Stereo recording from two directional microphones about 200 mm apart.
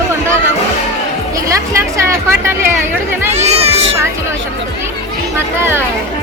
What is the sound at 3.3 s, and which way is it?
Speech, 30° right (ahead or behind).